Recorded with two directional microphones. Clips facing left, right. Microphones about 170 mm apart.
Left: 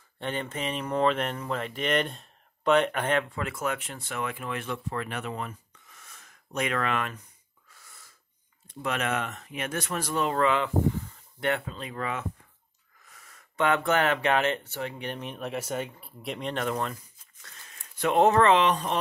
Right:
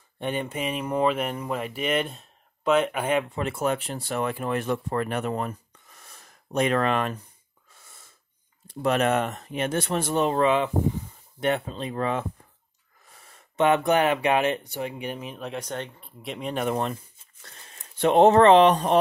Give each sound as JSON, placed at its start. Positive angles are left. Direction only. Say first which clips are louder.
{"t": 0.2, "sound": "speech", "louder": "right 3 dB", "side_deg": -10}
{"t": 3.3, "sound": "speech", "louder": "right 5 dB", "side_deg": -25}
{"t": 7.7, "sound": "owl", "louder": "right 1 dB", "side_deg": -25}
{"t": 8.6, "sound": "speech", "louder": "right 7 dB", "side_deg": -35}
{"t": 16.6, "sound": "speech", "louder": "right 4 dB", "side_deg": -25}